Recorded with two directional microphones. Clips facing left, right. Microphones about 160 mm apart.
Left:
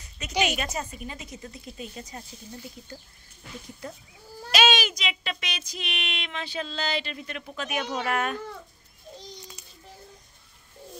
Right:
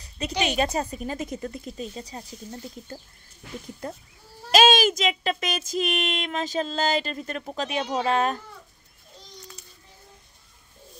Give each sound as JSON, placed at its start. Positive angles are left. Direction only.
{"t": 0.4, "sound": "a woman's voice", "side_deg": -30}
{"t": 1.8, "sound": "a woman's voice", "side_deg": -30}
{"t": 4.5, "sound": "speech", "side_deg": -45}